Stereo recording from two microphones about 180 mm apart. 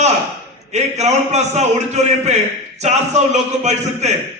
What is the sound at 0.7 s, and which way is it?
A man's voice, 40° right (ahead or behind).